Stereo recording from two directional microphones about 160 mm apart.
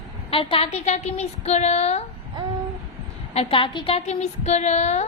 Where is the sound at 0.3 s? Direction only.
35° left (ahead or behind).